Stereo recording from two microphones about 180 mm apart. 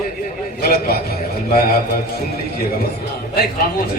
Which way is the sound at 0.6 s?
60° left (ahead or behind).